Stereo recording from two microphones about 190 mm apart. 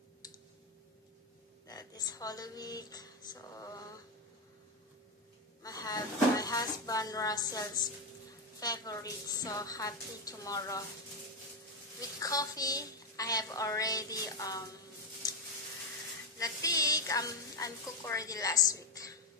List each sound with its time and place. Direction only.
1.7 s speech: 20° left (ahead or behind)
5.6 s speech: 20° left (ahead or behind)
12.0 s speech: 20° left (ahead or behind)
15.2 s a sound: 20° left (ahead or behind)
16.3 s a woman's voice: 20° left (ahead or behind)